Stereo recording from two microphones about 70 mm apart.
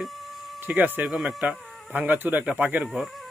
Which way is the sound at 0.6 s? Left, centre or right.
Right.